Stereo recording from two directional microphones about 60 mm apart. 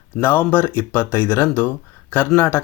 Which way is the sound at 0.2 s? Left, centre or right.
Left.